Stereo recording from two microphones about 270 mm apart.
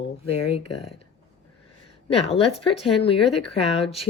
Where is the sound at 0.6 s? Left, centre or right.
Left.